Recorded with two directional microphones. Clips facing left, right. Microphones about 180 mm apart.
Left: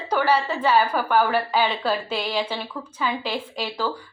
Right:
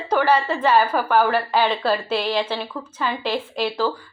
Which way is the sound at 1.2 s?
10° left (ahead or behind).